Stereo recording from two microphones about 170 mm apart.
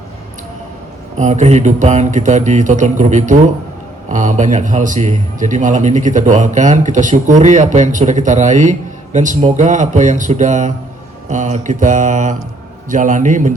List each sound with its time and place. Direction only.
1.1 s a man's voice: 45° right (ahead or behind)